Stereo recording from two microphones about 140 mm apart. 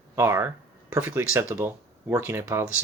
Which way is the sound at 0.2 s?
20° right (ahead or behind).